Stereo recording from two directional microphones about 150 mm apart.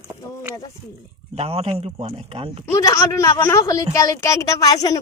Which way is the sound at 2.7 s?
20° left (ahead or behind).